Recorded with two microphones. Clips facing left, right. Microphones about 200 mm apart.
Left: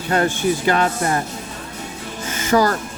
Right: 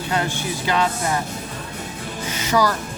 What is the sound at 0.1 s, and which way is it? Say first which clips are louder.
Speech: left 7 dB; 50° left (ahead or behind).